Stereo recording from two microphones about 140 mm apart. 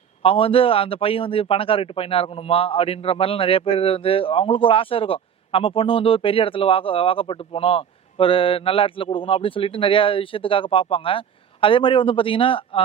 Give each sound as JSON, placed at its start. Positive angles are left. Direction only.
{"t": 0.2, "sound": "a man's voice", "side_deg": 40}